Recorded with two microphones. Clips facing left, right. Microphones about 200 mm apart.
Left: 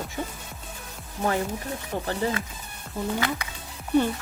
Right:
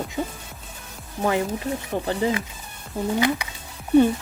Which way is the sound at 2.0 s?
15° right (ahead or behind).